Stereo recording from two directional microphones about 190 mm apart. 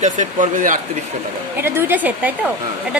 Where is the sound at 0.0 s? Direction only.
40° right (ahead or behind).